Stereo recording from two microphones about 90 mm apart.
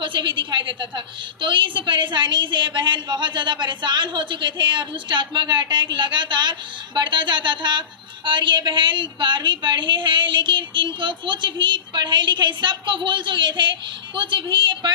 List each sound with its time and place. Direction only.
0.0 s a woman's voice: 65° right (ahead or behind)